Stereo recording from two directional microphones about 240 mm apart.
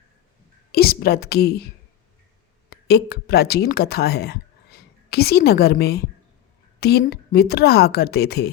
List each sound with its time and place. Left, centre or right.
0.7 s a woman's voice: left
2.6 s a woman's voice: left